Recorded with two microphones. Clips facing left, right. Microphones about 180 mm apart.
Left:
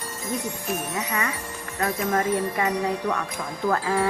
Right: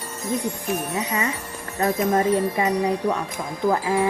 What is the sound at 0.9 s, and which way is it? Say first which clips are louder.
Speech: right 3 dB; 25° right (ahead or behind).